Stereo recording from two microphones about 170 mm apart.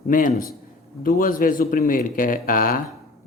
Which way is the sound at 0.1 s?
50° left (ahead or behind).